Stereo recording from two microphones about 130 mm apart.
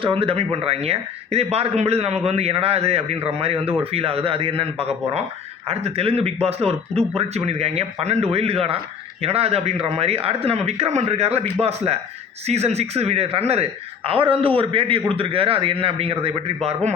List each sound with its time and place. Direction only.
0.0 s speech: 45° right (ahead or behind)
12.5 s speech: 55° right (ahead or behind)